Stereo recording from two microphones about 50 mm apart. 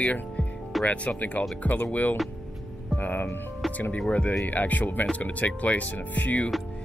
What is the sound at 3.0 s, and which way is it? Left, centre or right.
Music, left.